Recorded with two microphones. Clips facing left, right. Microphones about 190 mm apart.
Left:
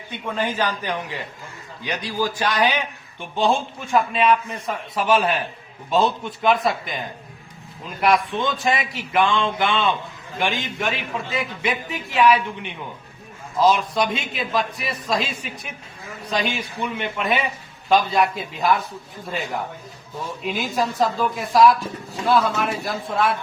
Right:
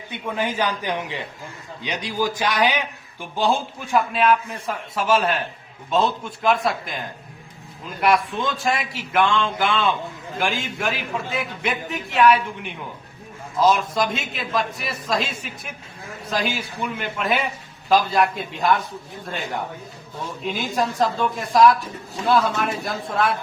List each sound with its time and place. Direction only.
0.1 s a man's voice: 10° right (ahead or behind)
8.0 s a man's voice: centre (ahead or behind)